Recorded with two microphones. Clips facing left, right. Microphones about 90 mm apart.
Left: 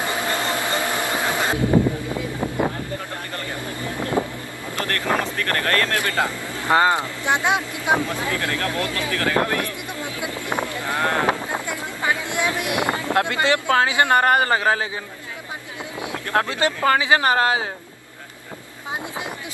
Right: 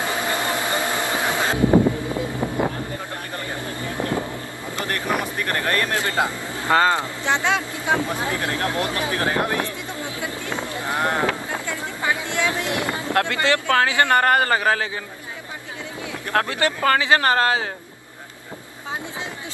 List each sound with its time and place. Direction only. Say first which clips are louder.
0.0 s a sound: even; 20° right (ahead or behind)
1.1 s music: even; 20° right (ahead or behind)
3.3 s vehicle: right 1 dB; 20° right (ahead or behind)
4.7 s vehicle: left 1 dB; 20° right (ahead or behind)
5.2 s speech: left 1 dB; 20° right (ahead or behind)
6.7 s speech: left 1 dB; 20° left (ahead or behind)
8.0 s speech: even; 20° right (ahead or behind)
10.2 s a sound: left 3 dB; 20° left (ahead or behind)
10.6 s a sound: even; 20° right (ahead or behind)
11.2 s a sound: left 2 dB; 20° left (ahead or behind)
12.5 s boat: left 2 dB; 20° left (ahead or behind)
13.1 s a man's voice: even; 20° left (ahead or behind)
16.3 s speech: even; 20° left (ahead or behind)